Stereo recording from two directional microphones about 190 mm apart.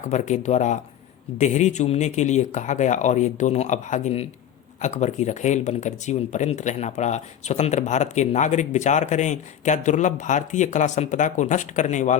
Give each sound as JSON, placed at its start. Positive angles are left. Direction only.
{"t": 0.1, "sound": "speech", "side_deg": 40}